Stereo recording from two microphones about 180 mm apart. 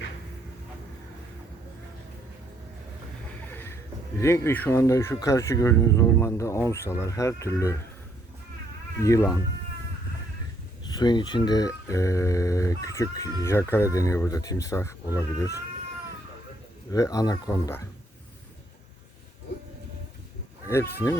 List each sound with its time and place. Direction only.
3.4 s a sound: 10° left (ahead or behind)
4.2 s speech: 15° left (ahead or behind)
9.0 s speech: 15° left (ahead or behind)
10.8 s speech: 25° left (ahead or behind)
16.9 s speech: 20° left (ahead or behind)
20.7 s speech: 15° left (ahead or behind)